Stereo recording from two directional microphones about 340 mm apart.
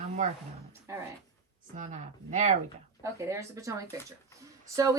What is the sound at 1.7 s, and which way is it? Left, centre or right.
Speech, right.